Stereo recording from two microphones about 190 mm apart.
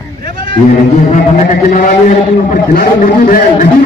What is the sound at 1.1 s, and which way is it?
A man's voice, 40° left (ahead or behind).